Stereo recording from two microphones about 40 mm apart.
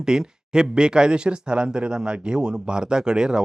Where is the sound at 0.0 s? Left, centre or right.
Centre.